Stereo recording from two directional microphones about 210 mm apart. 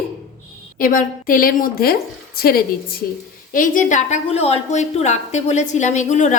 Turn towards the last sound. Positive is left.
turn(degrees=35)  # may be behind; listen again after turning